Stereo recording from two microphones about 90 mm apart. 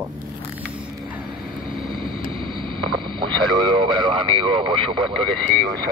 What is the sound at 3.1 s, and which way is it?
Radio, 60° right (ahead or behind).